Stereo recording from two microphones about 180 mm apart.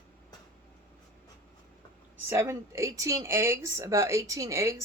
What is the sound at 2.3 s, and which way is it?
Speech, 15° right (ahead or behind).